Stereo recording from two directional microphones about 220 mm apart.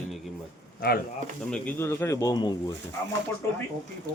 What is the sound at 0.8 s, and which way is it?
Speech, 45° left (ahead or behind).